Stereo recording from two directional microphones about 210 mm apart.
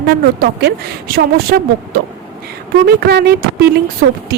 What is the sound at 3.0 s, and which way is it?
Speech, 50° right (ahead or behind).